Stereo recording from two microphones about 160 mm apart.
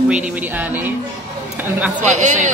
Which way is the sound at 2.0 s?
50° right (ahead or behind).